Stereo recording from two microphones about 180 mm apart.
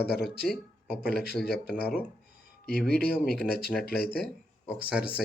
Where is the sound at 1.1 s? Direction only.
60° left (ahead or behind).